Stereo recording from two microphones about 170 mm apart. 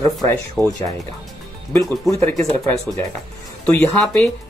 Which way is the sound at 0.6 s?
20° right (ahead or behind).